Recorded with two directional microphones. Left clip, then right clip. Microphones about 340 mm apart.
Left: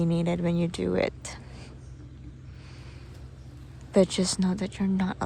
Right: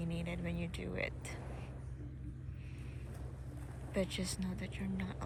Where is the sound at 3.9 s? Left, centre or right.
Centre.